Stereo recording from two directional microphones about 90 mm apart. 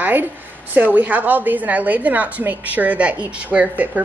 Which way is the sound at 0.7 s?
20° right (ahead or behind).